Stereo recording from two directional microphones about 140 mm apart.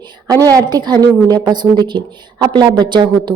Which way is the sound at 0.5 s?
30° right (ahead or behind).